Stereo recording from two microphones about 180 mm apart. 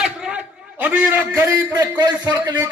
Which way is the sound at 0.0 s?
5° right (ahead or behind).